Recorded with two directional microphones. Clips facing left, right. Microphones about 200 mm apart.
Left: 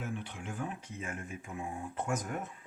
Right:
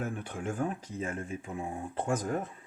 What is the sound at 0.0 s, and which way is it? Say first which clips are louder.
Speech: right 5 dB; 50° right (ahead or behind).